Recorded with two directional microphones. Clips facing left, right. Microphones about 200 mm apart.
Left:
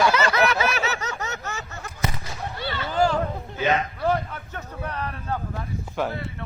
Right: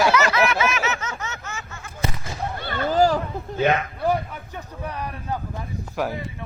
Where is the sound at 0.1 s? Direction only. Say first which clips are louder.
Right 1 dB; 30° left (ahead or behind).